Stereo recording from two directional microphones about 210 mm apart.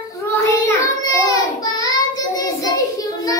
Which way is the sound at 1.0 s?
15° left (ahead or behind).